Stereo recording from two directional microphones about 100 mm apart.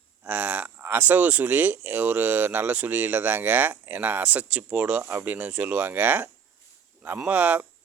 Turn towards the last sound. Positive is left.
turn(degrees=-15)  # may be behind; listen again after turning